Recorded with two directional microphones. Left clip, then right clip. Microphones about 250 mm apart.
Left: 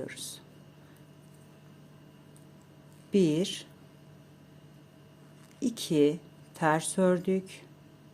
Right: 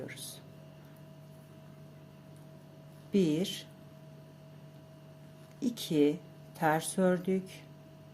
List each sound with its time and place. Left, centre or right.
0.0 s speech: centre
3.1 s a woman's voice: centre
5.5 s a woman's voice: centre